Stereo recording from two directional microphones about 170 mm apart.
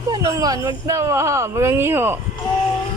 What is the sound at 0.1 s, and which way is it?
Speech, 20° right (ahead or behind).